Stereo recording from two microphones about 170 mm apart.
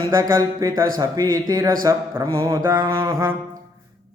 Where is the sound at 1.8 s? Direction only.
15° right (ahead or behind).